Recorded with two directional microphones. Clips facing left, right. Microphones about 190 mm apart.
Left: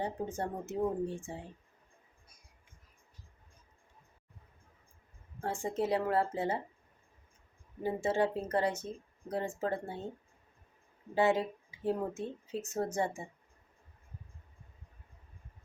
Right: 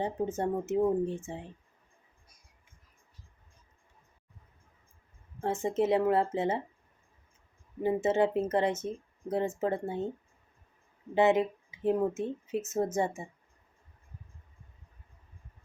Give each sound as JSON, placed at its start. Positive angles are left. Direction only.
{"t": 0.0, "sound": "speech", "side_deg": -20}
{"t": 5.4, "sound": "speech", "side_deg": -20}
{"t": 7.8, "sound": "speech", "side_deg": -20}
{"t": 11.1, "sound": "speech", "side_deg": -20}